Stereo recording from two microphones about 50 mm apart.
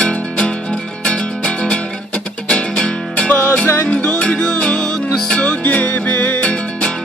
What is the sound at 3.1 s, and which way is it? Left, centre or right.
Music, left.